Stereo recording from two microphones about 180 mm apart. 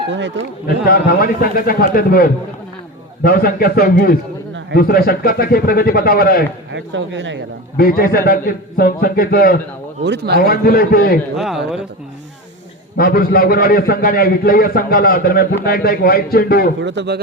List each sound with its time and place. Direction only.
0.1 s speech: 90° right
0.9 s a man's voice: 55° left (ahead or behind)
6.7 s speech: 90° right
7.8 s a man's voice: 55° left (ahead or behind)
10.0 s a man's voice: 70° right (ahead or behind)
10.4 s a man's voice: 55° left (ahead or behind)
11.3 s speech: centre (ahead or behind)
13.0 s a man's voice: 55° left (ahead or behind)
16.8 s a man's voice: 75° right (ahead or behind)